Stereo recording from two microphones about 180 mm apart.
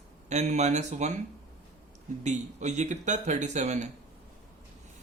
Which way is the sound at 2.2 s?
40° right (ahead or behind).